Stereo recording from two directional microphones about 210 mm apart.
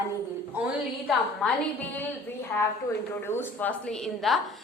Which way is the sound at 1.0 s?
5° left (ahead or behind).